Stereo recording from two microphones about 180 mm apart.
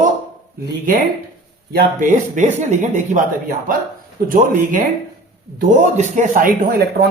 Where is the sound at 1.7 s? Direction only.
55° right (ahead or behind).